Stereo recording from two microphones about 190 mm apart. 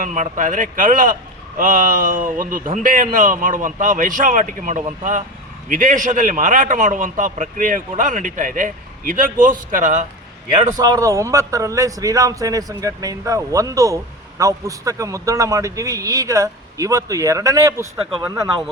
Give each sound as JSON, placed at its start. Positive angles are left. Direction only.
{"t": 0.0, "sound": "a man's voice", "side_deg": -40}
{"t": 10.8, "sound": "a man's voice", "side_deg": -20}